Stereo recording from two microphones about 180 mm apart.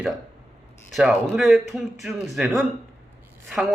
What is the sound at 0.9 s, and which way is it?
Speech, centre (ahead or behind).